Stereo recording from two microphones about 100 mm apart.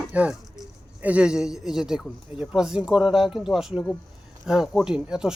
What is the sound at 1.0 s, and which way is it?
Speech, 10° right (ahead or behind).